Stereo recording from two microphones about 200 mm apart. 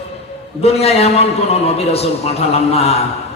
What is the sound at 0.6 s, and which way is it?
A man's voice, 30° left (ahead or behind).